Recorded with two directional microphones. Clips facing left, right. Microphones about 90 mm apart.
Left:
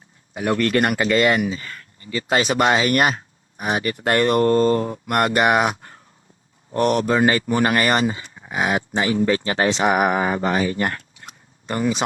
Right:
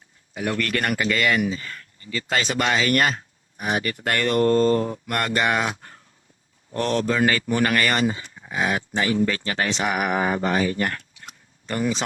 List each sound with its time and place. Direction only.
0.3 s speech: 30° left (ahead or behind)